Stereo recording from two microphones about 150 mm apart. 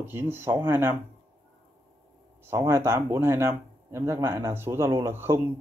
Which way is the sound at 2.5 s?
15° right (ahead or behind).